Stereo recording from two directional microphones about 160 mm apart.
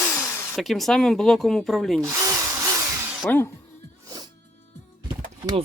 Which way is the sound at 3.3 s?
15° left (ahead or behind).